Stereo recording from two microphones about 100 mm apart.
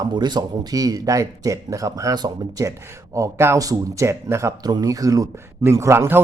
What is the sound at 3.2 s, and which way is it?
A man's voice, 25° right (ahead or behind).